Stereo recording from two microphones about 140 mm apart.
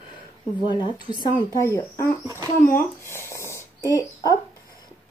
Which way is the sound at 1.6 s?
20° left (ahead or behind).